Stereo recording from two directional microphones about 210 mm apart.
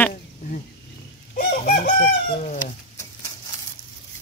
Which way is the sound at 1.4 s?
50° left (ahead or behind).